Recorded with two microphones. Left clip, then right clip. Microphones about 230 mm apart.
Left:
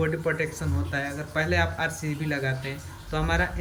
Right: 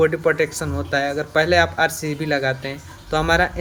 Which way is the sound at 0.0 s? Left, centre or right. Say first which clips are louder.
Right 9 dB; right.